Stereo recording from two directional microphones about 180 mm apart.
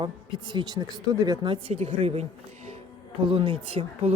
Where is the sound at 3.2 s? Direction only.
30° right (ahead or behind).